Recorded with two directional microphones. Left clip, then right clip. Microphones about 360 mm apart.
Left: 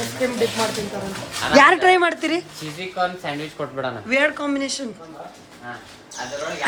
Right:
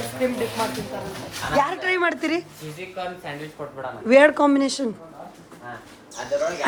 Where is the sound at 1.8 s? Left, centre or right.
Centre.